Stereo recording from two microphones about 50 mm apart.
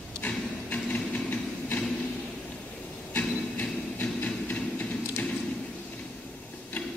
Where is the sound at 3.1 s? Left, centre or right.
Left.